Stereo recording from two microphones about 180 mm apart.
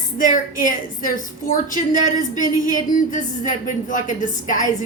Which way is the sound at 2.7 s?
45° left (ahead or behind).